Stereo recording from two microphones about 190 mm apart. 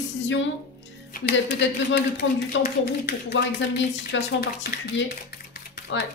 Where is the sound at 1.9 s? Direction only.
60° left (ahead or behind).